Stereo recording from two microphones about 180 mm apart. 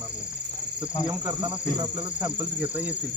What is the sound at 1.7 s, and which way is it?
Cricket, 25° right (ahead or behind).